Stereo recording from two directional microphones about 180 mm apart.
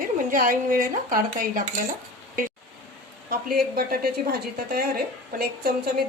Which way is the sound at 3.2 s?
55° right (ahead or behind).